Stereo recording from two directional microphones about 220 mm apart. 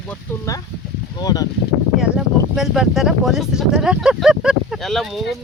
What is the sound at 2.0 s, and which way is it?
Speech, centre (ahead or behind).